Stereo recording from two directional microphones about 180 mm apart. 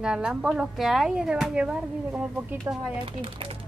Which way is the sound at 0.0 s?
5° right (ahead or behind).